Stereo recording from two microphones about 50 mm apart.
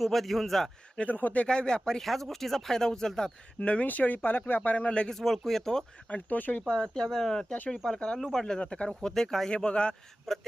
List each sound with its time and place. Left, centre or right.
0.0 s speech: centre
0.9 s speech: left
1.5 s speech: centre
3.6 s speech: left
4.9 s speech: centre
5.1 s speech: centre
6.1 s speech: left
6.7 s speech: centre
9.5 s speech: centre
10.3 s speech: centre